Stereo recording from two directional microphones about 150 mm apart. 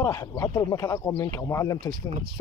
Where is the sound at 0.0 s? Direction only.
20° left (ahead or behind).